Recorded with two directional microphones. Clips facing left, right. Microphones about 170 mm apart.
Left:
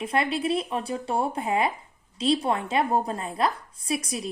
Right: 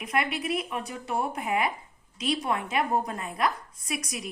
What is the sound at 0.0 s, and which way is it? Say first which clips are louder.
A woman's voice: left 4 dB; 30° left (ahead or behind).